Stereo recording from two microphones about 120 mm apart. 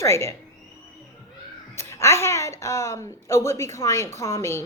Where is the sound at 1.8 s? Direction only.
25° left (ahead or behind).